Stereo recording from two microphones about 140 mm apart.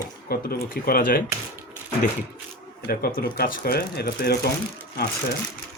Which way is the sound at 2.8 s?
90° left.